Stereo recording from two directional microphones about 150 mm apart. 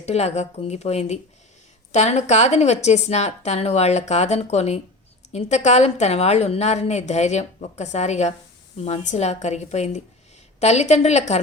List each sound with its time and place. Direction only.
0.0 s a woman's voice: 45° left (ahead or behind)